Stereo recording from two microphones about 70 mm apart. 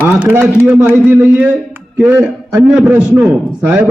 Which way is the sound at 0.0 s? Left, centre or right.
Right.